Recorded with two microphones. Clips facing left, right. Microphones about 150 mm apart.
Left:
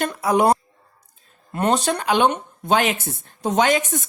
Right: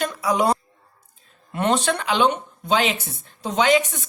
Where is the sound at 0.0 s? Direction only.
50° left (ahead or behind).